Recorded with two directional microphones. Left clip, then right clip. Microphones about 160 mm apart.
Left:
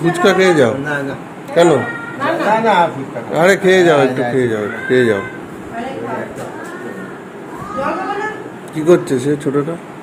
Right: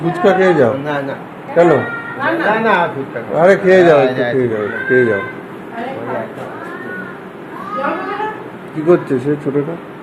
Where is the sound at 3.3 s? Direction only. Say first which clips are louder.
Right 2 dB; 20° left (ahead or behind).